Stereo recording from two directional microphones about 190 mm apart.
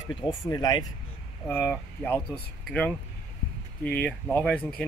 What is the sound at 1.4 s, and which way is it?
Speech, 10° left (ahead or behind).